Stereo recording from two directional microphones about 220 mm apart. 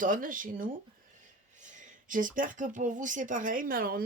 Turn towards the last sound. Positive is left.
turn(degrees=-40)  # may be behind; listen again after turning